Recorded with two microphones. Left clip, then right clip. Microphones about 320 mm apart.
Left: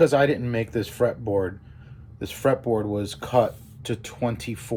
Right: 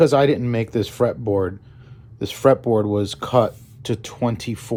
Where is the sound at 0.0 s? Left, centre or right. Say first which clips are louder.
Right 3 dB; right.